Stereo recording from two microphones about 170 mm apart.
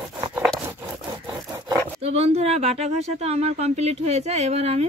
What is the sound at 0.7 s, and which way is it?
Wood, 20° right (ahead or behind).